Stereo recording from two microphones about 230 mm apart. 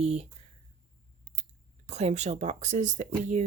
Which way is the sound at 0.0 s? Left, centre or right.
Right.